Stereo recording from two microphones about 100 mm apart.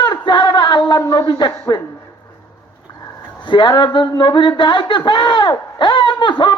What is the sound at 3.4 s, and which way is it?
Speech, 50° left (ahead or behind).